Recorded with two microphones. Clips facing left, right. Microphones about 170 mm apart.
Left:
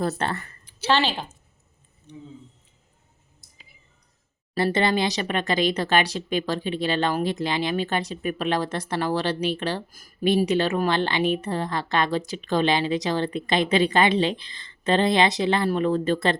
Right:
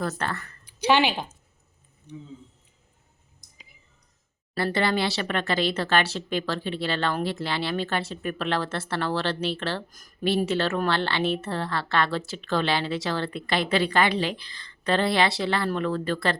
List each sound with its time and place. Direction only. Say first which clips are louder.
0.0 s a woman's voice: left 3 dB; 25° left (ahead or behind)
0.7 s speech: right 1 dB; 15° right (ahead or behind)
4.5 s speech: left 3 dB; 20° left (ahead or behind)